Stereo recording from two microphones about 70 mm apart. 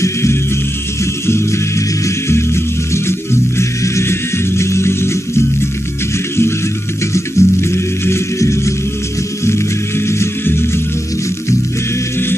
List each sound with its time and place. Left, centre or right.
0.0 s music: left
7.2 s music: left